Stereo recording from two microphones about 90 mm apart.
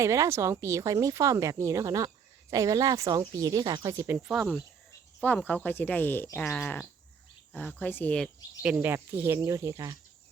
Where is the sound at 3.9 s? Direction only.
25° right (ahead or behind).